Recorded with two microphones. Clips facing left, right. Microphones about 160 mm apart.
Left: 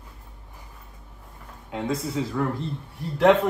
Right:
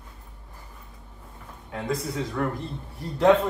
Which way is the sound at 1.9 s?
25° left (ahead or behind).